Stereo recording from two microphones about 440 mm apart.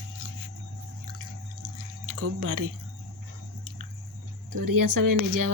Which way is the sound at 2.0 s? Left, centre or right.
Right.